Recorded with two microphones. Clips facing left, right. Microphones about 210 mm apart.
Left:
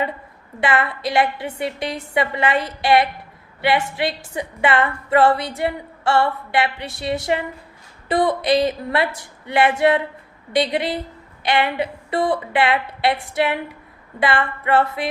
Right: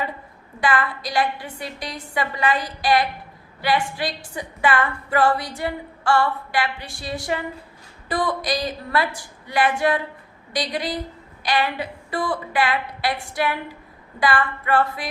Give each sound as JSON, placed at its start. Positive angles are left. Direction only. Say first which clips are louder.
{"t": 0.6, "sound": "a woman's voice", "louder": "left 2 dB", "side_deg": 25}